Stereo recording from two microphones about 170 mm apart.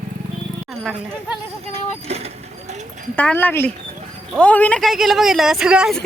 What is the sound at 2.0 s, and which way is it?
Vehicle, 40° right (ahead or behind).